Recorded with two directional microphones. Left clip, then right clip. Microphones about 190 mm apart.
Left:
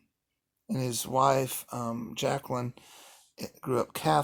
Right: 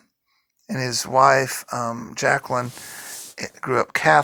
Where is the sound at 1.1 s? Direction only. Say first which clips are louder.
Right 10 dB; 60° right (ahead or behind).